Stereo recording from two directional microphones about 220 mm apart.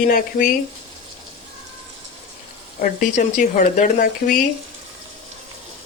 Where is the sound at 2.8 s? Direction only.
35° left (ahead or behind).